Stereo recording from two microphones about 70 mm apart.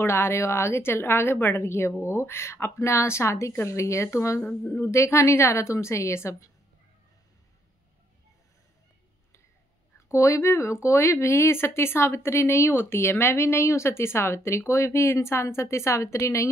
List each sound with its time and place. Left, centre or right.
0.0 s a woman's voice: left
10.1 s speech: left